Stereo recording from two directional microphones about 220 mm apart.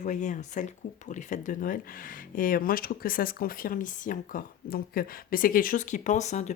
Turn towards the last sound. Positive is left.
turn(degrees=30)  # may be behind; listen again after turning